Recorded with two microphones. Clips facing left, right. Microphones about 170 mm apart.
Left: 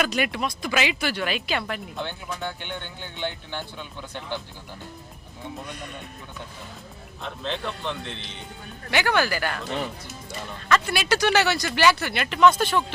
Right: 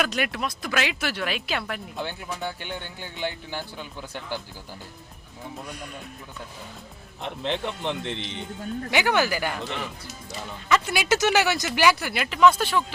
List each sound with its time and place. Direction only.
0.0 s speech: centre (ahead or behind)
5.5 s speech: 5° right (ahead or behind)
7.2 s speech: 20° right (ahead or behind)
10.7 s speech: 15° right (ahead or behind)